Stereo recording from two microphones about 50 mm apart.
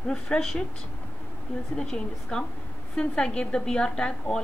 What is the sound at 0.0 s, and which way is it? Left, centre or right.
Speech, centre.